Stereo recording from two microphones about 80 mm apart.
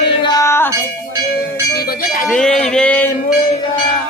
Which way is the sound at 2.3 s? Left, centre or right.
Centre.